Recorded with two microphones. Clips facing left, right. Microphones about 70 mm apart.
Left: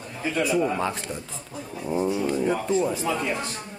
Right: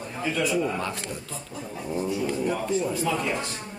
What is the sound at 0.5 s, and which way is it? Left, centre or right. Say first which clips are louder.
Speech: left 3 dB; centre.